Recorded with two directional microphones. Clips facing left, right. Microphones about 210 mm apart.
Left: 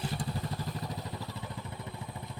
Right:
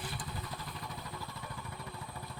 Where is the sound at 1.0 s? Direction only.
20° left (ahead or behind).